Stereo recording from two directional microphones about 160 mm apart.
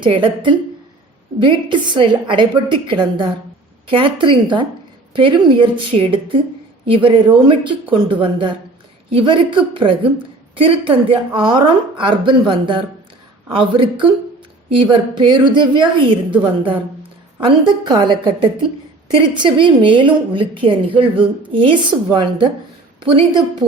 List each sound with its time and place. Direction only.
0.0 s a woman's voice: 30° right (ahead or behind)